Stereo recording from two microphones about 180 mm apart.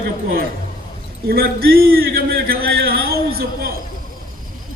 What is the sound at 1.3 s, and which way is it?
Speech, 55° right (ahead or behind).